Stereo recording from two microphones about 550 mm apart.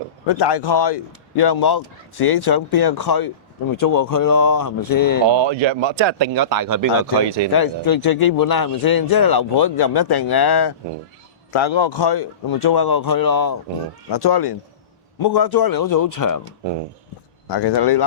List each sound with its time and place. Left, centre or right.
0.3 s a man's voice: left
5.3 s speech: right
7.5 s a man's voice: left
11.5 s a man's voice: left
17.5 s speech: left